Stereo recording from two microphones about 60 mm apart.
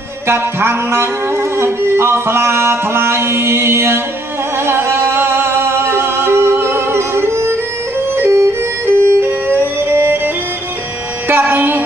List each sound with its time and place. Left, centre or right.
0.3 s music: right
8.2 s music: right
8.8 s music: right